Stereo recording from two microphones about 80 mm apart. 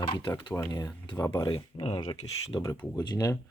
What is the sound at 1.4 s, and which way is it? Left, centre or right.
Speech, left.